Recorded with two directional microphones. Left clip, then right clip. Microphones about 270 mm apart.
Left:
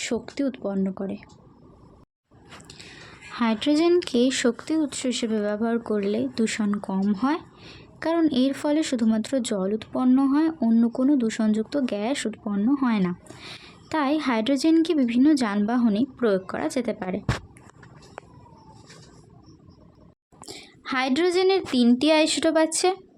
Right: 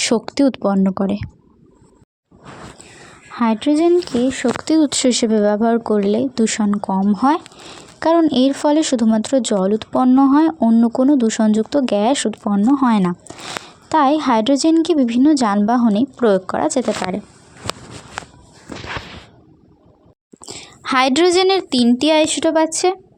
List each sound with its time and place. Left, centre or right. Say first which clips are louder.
0.0 s a woman's voice: right 11 dB; right
3.3 s speech: right 6 dB; centre
4.6 s speech: right 11 dB; right
20.5 s speech: right 10 dB; centre